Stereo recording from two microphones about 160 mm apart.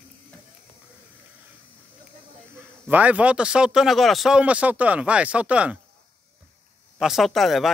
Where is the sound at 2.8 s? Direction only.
10° right (ahead or behind).